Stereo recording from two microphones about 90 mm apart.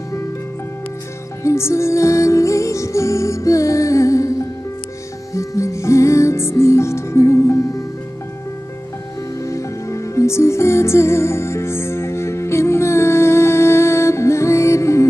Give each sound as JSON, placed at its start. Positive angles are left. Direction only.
{"t": 1.4, "sound": "music", "side_deg": 30}
{"t": 5.3, "sound": "music", "side_deg": 35}
{"t": 9.4, "sound": "music", "side_deg": 35}